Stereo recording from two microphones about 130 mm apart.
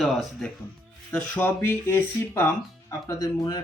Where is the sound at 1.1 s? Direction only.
15° left (ahead or behind).